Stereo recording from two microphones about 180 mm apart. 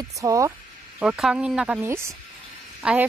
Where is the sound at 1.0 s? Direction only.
5° right (ahead or behind).